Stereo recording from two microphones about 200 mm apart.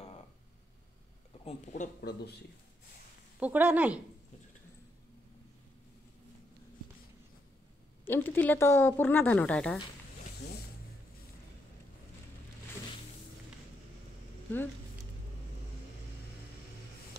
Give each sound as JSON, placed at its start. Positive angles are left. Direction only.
{"t": 1.4, "sound": "speech", "side_deg": 35}
{"t": 2.0, "sound": "speech", "side_deg": 55}
{"t": 3.3, "sound": "speech", "side_deg": -5}
{"t": 8.1, "sound": "speech", "side_deg": 10}